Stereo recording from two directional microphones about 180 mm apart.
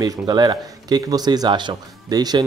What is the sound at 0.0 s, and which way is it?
Speech, 20° right (ahead or behind).